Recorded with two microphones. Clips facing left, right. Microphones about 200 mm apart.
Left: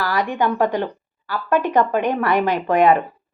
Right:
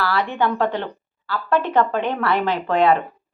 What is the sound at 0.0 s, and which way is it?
Speech, 15° left (ahead or behind).